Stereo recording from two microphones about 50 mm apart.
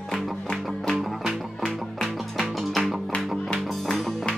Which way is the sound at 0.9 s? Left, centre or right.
Centre.